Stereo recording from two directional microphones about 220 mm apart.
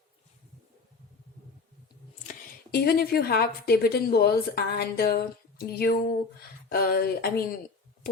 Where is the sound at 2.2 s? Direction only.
40° left (ahead or behind).